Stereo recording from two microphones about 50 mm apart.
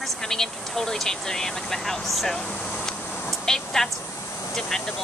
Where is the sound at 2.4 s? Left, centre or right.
Left.